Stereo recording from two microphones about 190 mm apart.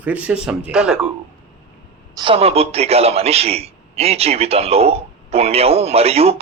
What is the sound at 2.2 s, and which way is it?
A man's voice, 30° right (ahead or behind).